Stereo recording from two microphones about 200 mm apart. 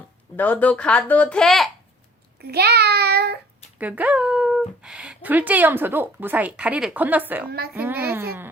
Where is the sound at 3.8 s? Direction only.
10° right (ahead or behind).